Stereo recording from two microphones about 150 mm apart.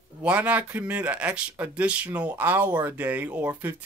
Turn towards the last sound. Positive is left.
turn(degrees=-10)  # may be behind; listen again after turning